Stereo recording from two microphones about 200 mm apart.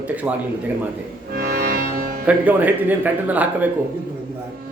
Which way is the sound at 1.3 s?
50° right (ahead or behind).